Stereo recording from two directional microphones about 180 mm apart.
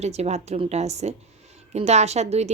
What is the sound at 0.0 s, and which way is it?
A woman's voice, 35° right (ahead or behind).